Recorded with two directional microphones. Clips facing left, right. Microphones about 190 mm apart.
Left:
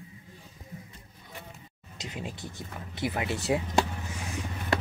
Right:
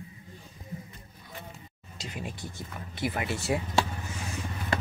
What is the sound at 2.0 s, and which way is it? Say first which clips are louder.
Speech: even; 20° left (ahead or behind).